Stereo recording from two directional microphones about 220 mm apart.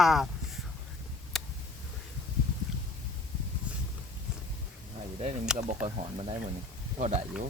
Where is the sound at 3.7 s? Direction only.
5° right (ahead or behind).